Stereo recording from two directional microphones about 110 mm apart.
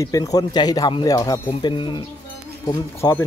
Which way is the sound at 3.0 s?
30° left (ahead or behind).